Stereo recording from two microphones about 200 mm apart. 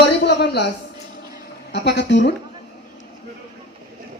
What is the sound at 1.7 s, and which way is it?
Speech, 60° left (ahead or behind).